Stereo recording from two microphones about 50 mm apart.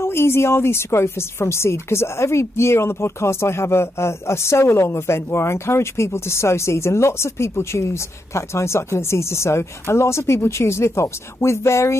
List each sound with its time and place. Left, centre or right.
0.0 s a woman's voice: left